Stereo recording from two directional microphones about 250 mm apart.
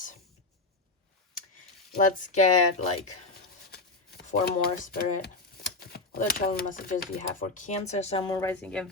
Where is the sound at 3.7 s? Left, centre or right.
Left.